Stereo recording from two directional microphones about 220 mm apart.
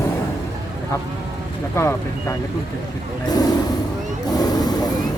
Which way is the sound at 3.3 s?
15° left (ahead or behind).